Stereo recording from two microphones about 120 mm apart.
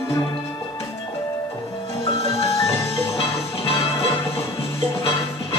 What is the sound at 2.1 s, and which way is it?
Music, 50° left (ahead or behind).